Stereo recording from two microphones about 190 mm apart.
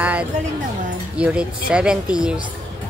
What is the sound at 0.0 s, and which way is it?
Music, 5° right (ahead or behind).